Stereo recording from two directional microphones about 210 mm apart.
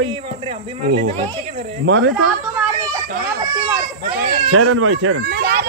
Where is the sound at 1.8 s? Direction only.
60° right (ahead or behind).